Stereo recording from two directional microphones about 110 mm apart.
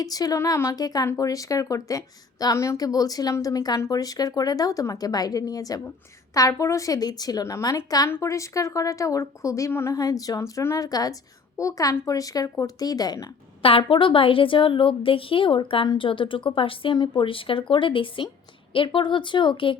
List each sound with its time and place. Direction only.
0.0 s a woman's voice: 35° left (ahead or behind)
13.6 s a woman's voice: 55° left (ahead or behind)